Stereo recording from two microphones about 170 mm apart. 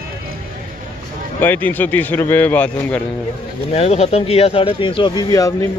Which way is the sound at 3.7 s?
40° left (ahead or behind).